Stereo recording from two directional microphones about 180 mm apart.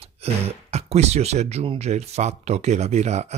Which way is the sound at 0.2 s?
35° right (ahead or behind).